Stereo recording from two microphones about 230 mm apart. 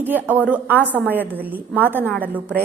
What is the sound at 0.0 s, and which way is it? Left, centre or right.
A woman's voice, centre.